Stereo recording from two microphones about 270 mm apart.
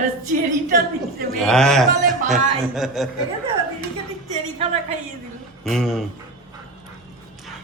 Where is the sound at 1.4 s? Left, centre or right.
Centre.